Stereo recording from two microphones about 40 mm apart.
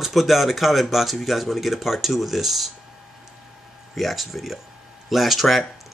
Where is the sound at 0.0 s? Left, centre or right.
Centre.